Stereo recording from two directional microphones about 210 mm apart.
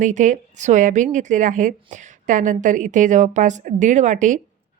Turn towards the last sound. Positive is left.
turn(degrees=-35)  # may be behind; listen again after turning